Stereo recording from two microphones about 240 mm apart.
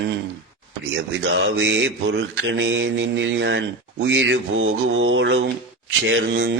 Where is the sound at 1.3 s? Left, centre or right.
Right.